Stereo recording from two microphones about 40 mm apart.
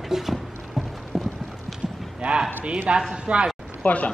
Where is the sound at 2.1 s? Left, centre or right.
Right.